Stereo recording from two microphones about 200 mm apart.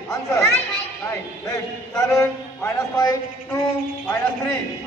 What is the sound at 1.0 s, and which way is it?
A man's voice, 15° left (ahead or behind).